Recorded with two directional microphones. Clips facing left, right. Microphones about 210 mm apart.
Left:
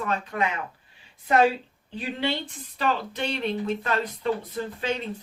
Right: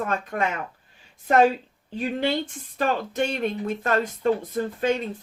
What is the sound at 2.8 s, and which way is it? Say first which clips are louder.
Speech: right 3 dB; 45° right (ahead or behind).